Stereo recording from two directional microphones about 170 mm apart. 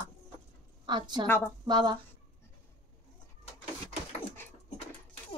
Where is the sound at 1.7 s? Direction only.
25° right (ahead or behind).